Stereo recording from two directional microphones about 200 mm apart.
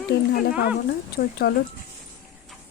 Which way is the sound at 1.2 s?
55° left (ahead or behind).